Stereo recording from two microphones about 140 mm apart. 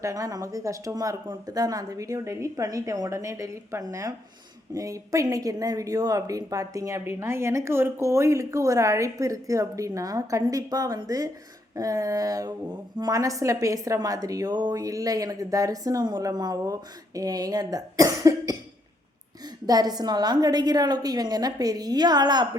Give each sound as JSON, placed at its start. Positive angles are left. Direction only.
{"t": 0.0, "sound": "speech", "side_deg": -25}
{"t": 19.6, "sound": "speech", "side_deg": -30}